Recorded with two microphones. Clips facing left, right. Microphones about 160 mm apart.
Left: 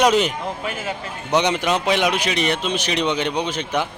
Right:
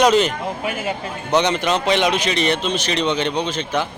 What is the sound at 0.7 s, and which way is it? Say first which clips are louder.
Speech: right 6 dB; 10° right (ahead or behind).